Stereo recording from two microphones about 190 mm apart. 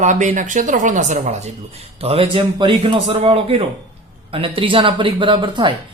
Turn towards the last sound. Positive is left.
turn(degrees=-25)  # may be behind; listen again after turning